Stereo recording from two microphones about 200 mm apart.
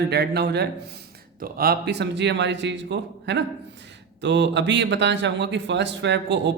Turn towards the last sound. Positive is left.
turn(degrees=-60)  # may be behind; listen again after turning